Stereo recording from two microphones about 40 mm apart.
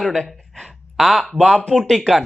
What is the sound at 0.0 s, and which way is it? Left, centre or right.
Speech, centre.